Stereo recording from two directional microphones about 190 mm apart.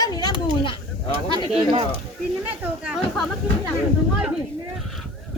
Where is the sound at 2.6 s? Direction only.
5° right (ahead or behind).